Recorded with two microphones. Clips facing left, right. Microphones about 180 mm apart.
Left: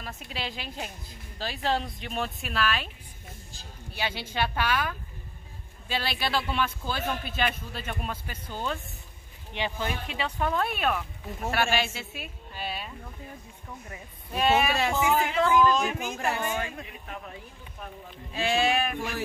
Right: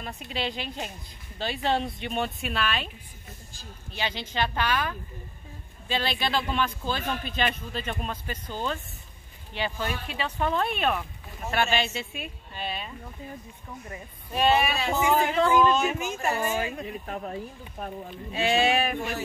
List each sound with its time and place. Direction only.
0.0 s speech: centre (ahead or behind)
3.9 s a man's voice: 10° left (ahead or behind)
14.4 s a woman's voice: centre (ahead or behind)
16.8 s speech: 40° right (ahead or behind)
18.3 s speech: centre (ahead or behind)